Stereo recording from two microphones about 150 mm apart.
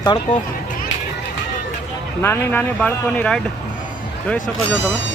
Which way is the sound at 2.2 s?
15° left (ahead or behind).